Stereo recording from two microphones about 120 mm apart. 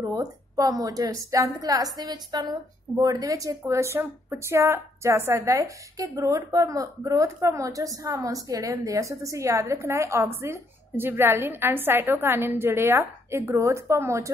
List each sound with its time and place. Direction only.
0.0 s a woman's voice: 30° right (ahead or behind)